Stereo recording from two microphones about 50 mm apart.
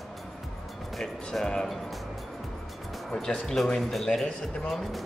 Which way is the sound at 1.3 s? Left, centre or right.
Centre.